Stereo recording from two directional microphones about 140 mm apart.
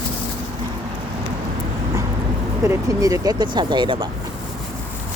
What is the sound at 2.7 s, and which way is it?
Speech, 25° right (ahead or behind).